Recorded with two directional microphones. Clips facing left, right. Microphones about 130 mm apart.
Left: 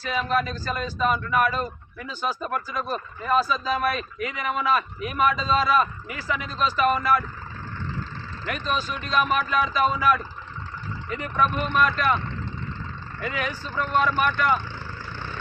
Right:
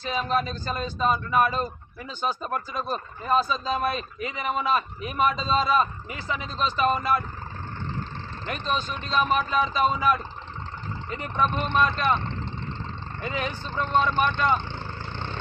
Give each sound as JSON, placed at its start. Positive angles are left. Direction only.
{"t": 0.0, "sound": "a man's voice", "side_deg": -30}
{"t": 8.4, "sound": "a man's voice", "side_deg": -30}
{"t": 13.2, "sound": "a man's voice", "side_deg": -25}
{"t": 15.1, "sound": "vehicle", "side_deg": -25}